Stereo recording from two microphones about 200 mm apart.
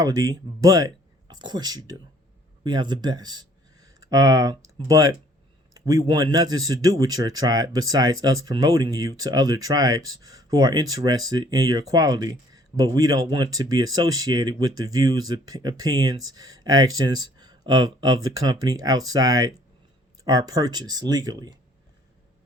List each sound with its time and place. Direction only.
0.0 s speech: 15° right (ahead or behind)